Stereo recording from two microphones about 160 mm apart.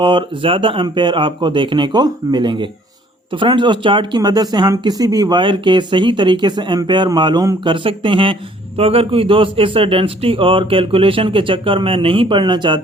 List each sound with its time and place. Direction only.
0.0 s a man's voice: 30° right (ahead or behind)